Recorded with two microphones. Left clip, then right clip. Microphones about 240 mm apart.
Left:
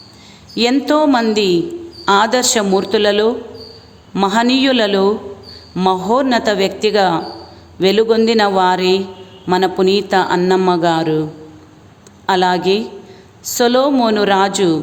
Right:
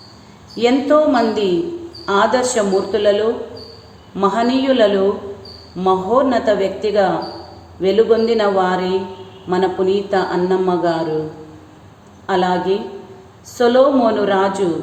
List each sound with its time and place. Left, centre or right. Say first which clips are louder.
0.5 s a man's voice: right 1 dB; left
12.2 s a man's voice: left 3 dB; left